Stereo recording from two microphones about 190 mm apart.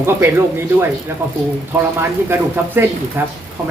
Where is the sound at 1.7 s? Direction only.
10° right (ahead or behind).